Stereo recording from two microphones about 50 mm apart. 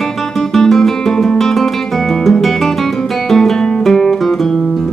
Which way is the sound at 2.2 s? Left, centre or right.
Centre.